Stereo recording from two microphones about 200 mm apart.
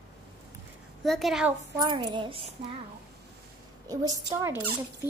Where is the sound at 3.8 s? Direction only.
15° right (ahead or behind).